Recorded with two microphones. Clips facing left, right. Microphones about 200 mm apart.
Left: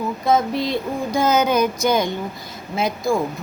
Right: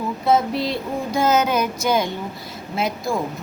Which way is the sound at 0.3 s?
5° right (ahead or behind).